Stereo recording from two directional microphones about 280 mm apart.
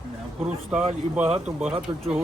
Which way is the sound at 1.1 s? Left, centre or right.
Centre.